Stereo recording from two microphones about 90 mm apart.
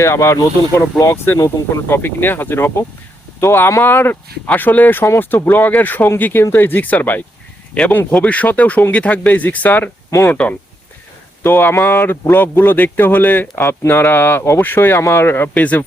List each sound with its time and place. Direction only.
0.0 s speech: 35° left (ahead or behind)
10.1 s speech: 30° left (ahead or behind)
11.4 s speech: 25° left (ahead or behind)